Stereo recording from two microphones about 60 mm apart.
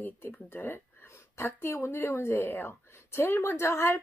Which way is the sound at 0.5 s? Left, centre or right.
Left.